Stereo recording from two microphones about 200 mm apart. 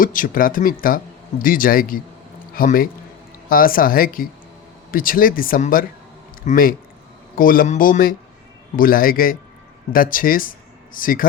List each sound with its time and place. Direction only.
0.0 s speech: 45° left (ahead or behind)